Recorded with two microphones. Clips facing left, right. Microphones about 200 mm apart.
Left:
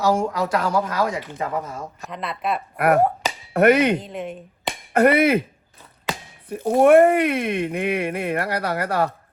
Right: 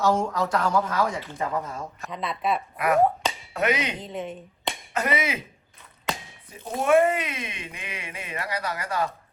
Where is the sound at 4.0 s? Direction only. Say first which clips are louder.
Left 2 dB; centre (ahead or behind).